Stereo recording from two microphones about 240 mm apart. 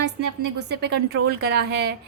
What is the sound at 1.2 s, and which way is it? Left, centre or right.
Speech, right.